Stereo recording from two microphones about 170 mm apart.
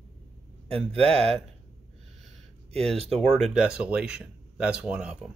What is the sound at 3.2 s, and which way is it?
Speech, centre (ahead or behind).